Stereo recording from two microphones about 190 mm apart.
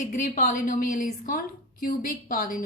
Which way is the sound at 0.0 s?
40° left (ahead or behind).